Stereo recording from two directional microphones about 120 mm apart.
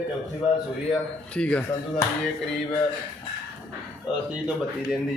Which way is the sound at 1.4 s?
10° left (ahead or behind).